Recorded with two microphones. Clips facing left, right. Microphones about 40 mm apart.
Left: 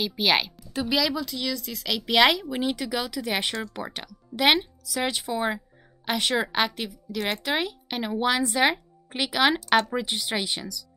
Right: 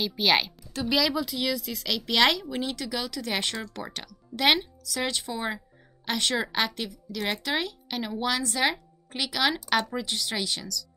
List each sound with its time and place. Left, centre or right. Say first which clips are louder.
0.0 s a woman's voice: left 1 dB; centre